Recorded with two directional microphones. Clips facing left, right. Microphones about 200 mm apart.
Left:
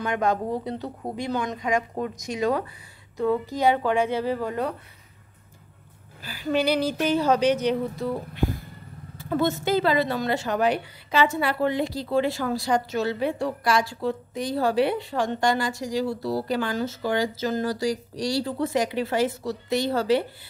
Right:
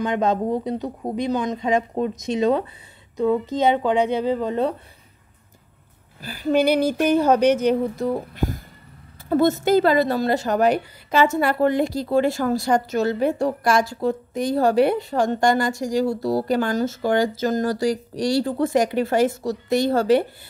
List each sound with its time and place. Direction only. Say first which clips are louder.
0.0 s speech: right 4 dB; 20° right (ahead or behind)
6.2 s a woman's voice: right 5 dB; 50° right (ahead or behind)